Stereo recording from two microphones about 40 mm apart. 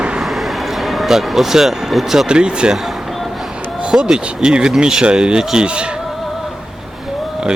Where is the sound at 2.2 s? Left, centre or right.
Right.